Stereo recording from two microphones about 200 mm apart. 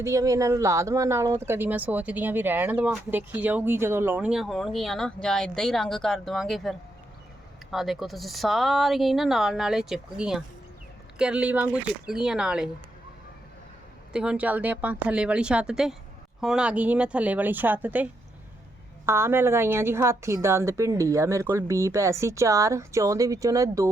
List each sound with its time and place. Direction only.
0.0 s a woman's voice: 15° right (ahead or behind)
14.1 s a woman's voice: 5° right (ahead or behind)